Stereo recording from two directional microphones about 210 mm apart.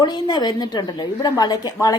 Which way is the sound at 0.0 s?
20° left (ahead or behind).